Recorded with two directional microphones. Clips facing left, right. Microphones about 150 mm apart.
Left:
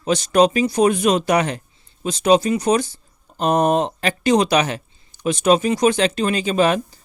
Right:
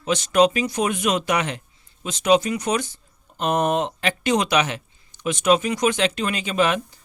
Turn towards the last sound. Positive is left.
turn(degrees=35)  # may be behind; listen again after turning